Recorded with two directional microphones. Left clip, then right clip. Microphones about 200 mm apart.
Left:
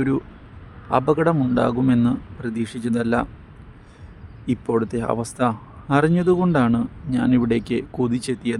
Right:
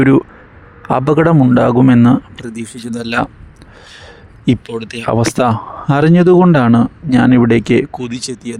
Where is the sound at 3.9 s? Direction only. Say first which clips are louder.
Right 12 dB; 45° right (ahead or behind).